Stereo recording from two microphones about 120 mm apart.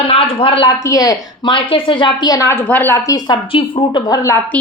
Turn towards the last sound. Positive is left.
turn(degrees=40)  # may be behind; listen again after turning